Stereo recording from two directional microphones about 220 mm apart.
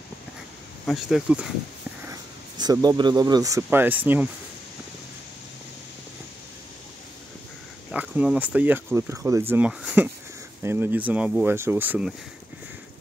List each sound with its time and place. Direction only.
0.8 s speech: centre (ahead or behind)
2.0 s speech: 15° right (ahead or behind)
7.9 s speech: 5° right (ahead or behind)